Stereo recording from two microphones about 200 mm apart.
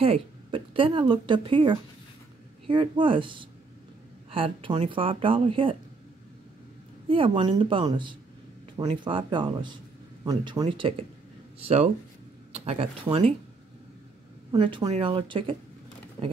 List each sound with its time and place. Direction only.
0.0 s a woman's voice: 25° right (ahead or behind)
7.1 s a woman's voice: 25° right (ahead or behind)
14.5 s a woman's voice: 20° right (ahead or behind)